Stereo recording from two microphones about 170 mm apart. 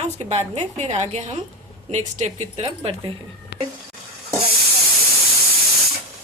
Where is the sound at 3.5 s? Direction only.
80° left.